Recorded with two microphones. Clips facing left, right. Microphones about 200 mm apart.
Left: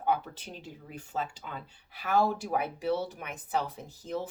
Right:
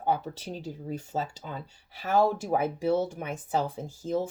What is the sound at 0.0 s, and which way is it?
Speech, 35° right (ahead or behind).